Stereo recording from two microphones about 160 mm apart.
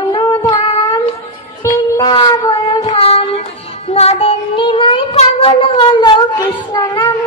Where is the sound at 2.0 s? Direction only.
30° left (ahead or behind).